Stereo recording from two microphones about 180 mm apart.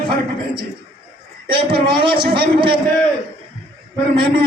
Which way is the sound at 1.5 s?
30° right (ahead or behind).